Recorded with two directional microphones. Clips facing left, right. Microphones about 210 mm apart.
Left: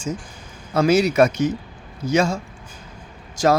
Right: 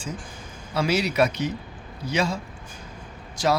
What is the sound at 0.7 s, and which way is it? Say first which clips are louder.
Speech: left 7 dB; 45° left (ahead or behind).